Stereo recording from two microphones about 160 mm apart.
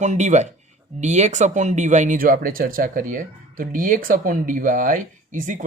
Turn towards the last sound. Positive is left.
turn(degrees=-55)  # may be behind; listen again after turning